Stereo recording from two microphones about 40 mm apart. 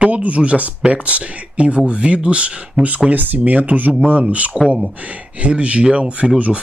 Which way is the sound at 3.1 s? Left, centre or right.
Right.